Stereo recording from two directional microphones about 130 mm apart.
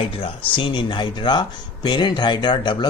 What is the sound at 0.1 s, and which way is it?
Speech, 45° left (ahead or behind).